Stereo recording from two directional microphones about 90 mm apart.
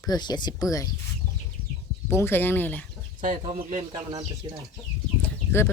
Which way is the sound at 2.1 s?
25° left (ahead or behind).